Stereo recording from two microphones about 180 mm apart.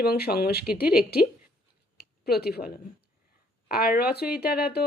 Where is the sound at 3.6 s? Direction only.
55° left (ahead or behind).